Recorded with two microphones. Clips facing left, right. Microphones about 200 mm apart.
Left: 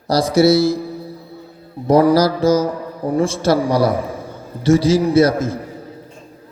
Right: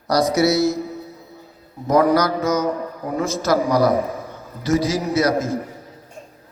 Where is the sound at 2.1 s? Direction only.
30° left (ahead or behind).